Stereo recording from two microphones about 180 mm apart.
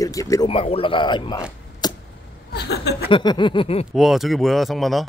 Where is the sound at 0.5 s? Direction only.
30° left (ahead or behind).